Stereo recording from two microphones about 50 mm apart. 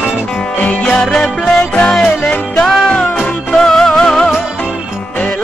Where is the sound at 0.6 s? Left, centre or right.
Left.